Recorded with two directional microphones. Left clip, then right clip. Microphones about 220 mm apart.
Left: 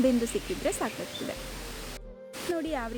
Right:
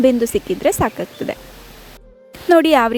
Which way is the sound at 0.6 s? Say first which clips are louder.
Right 15 dB; 40° right (ahead or behind).